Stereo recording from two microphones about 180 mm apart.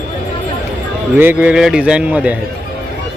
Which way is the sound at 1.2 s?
10° right (ahead or behind).